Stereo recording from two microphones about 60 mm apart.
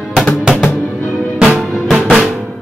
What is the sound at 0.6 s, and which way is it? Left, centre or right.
Music, centre.